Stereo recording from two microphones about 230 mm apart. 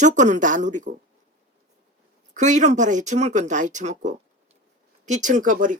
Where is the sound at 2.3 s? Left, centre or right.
Right.